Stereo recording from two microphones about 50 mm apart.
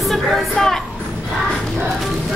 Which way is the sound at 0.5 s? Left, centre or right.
Centre.